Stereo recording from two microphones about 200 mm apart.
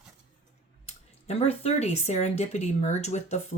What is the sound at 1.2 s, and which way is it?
Speech, 30° left (ahead or behind).